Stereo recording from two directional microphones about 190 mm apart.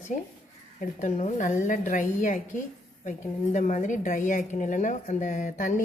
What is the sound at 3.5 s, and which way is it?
A woman's voice, 40° left (ahead or behind).